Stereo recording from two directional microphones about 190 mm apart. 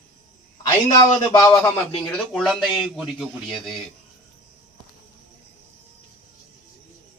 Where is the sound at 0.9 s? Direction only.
20° left (ahead or behind).